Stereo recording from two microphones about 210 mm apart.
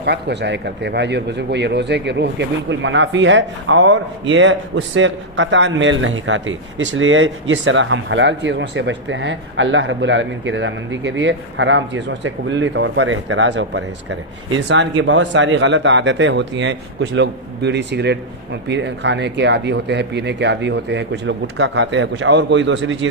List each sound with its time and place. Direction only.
0.0 s speech: 55° right (ahead or behind)